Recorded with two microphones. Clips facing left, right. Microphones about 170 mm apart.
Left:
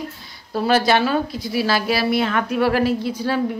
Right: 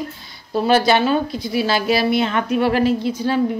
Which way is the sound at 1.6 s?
25° right (ahead or behind).